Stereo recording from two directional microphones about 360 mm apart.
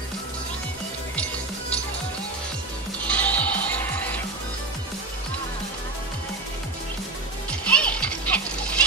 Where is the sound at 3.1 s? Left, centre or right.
Centre.